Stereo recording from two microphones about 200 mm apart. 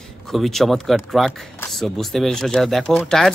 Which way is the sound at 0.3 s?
Centre (ahead or behind).